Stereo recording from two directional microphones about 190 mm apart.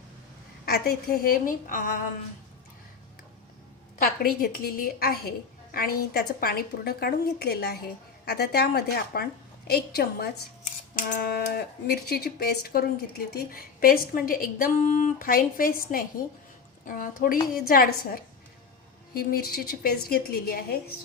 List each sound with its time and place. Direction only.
0.6 s speech: 55° left (ahead or behind)
4.2 s a woman's voice: 50° left (ahead or behind)
10.6 s speech: 45° left (ahead or behind)